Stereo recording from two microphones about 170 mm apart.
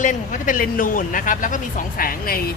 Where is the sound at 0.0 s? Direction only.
50° left (ahead or behind).